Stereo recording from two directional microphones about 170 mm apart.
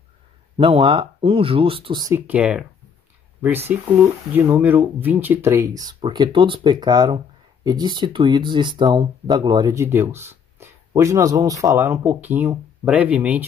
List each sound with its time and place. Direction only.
0.6 s speech: 30° right (ahead or behind)
2.1 s speech: 10° right (ahead or behind)